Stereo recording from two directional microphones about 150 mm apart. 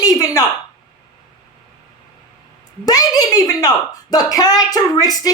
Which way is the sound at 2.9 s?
25° left (ahead or behind).